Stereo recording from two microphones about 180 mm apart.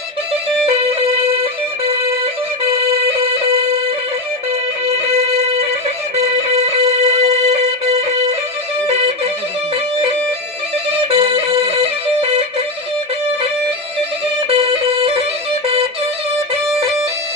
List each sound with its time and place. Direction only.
0.6 s music: 35° right (ahead or behind)
5.3 s music: 35° right (ahead or behind)
11.1 s music: 35° right (ahead or behind)
14.5 s music: 35° right (ahead or behind)